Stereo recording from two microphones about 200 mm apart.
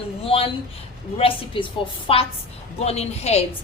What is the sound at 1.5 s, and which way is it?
A woman's voice, 25° left (ahead or behind).